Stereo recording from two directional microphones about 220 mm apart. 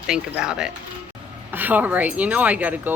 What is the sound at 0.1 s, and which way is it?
Speech, 5° right (ahead or behind).